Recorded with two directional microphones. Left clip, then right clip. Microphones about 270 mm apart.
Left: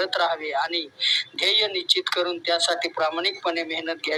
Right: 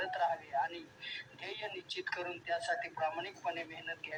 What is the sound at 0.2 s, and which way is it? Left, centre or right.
Speech, left.